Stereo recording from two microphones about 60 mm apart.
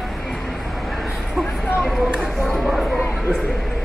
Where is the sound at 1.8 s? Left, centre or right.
Centre.